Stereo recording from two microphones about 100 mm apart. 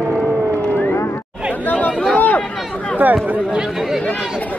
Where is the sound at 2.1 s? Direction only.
15° left (ahead or behind).